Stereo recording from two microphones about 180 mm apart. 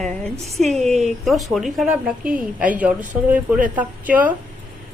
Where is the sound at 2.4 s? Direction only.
5° right (ahead or behind).